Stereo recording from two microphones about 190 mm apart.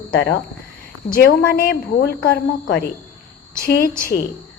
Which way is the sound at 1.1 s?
50° left (ahead or behind).